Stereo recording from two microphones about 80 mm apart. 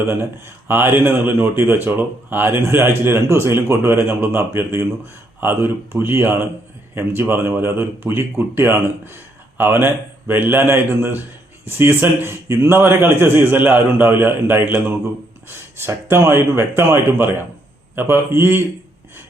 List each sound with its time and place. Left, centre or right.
0.7 s a man's voice: right